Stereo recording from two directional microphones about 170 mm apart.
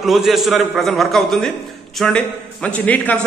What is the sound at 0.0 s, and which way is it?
A man's voice, centre (ahead or behind).